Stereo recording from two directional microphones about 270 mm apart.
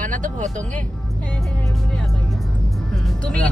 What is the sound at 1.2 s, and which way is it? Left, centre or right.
Speech, centre.